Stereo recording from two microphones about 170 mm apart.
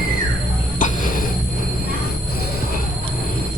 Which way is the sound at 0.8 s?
50° left (ahead or behind).